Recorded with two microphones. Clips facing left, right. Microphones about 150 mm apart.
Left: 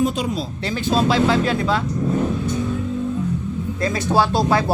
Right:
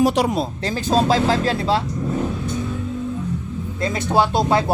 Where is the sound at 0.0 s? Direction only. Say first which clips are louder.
Right 4 dB; 75° right (ahead or behind).